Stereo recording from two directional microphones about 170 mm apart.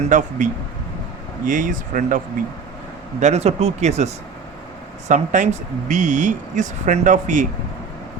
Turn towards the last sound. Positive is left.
turn(degrees=-45)  # may be behind; listen again after turning